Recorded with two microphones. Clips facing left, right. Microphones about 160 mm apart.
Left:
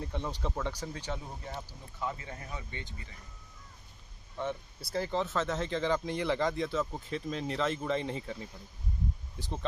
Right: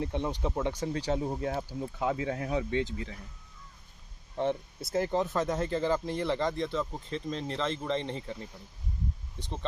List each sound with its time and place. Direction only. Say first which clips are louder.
0.0 s speech: right 5 dB; 20° right (ahead or behind)
1.0 s speech: right 9 dB; 40° right (ahead or behind)
1.4 s speech: right 10 dB; 75° right (ahead or behind); by 3.2 s 90° right
4.4 s speech: right 6 dB; 30° right (ahead or behind)
5.1 s speech: even; 15° right (ahead or behind); by 8.4 s 5° left (ahead or behind)